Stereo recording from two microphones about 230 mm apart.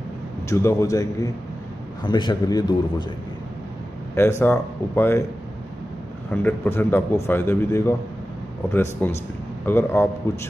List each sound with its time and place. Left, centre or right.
0.5 s a man's voice: centre
4.1 s a man's voice: centre
6.3 s a man's voice: centre
9.0 s a man's voice: centre